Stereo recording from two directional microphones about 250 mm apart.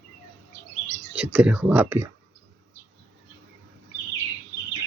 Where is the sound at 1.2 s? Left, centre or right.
Centre.